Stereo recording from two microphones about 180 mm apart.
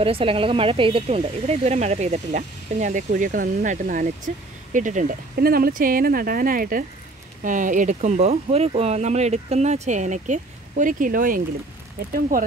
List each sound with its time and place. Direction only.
0.0 s speech: 30° right (ahead or behind); by 12.4 s 50° right (ahead or behind)